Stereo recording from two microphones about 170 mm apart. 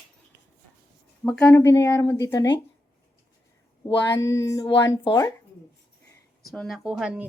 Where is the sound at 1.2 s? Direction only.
10° left (ahead or behind).